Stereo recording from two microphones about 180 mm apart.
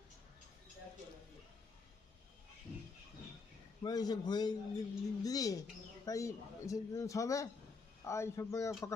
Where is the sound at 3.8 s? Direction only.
20° left (ahead or behind).